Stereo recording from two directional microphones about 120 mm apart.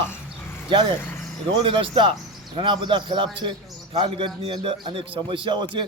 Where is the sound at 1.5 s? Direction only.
45° right (ahead or behind).